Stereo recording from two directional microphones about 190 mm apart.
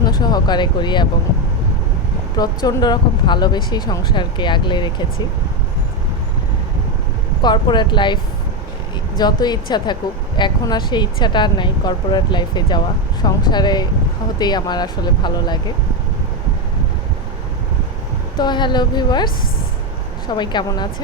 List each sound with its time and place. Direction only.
0.0 s speech: 20° left (ahead or behind)
2.4 s speech: 20° left (ahead or behind)
7.4 s speech: 25° left (ahead or behind)
18.3 s speech: 25° left (ahead or behind)